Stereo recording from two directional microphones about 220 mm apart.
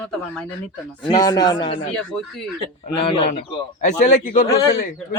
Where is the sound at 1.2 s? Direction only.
15° left (ahead or behind).